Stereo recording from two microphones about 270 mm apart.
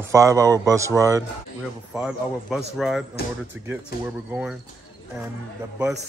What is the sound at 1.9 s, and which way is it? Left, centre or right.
Speech, centre.